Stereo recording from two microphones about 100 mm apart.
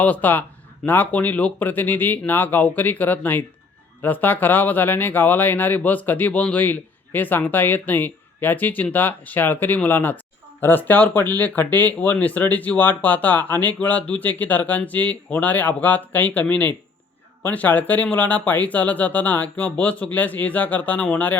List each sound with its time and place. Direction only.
0.0 s speech: 15° left (ahead or behind)